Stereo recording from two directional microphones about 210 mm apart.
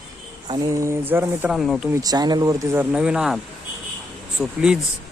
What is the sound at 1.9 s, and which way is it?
Speech, 20° right (ahead or behind).